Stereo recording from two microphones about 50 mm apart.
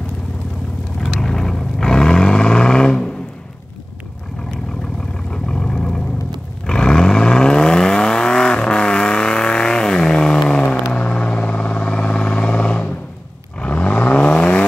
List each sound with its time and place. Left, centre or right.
1.0 s vehicle: centre
5.3 s vehicle: centre
13.6 s a sound: left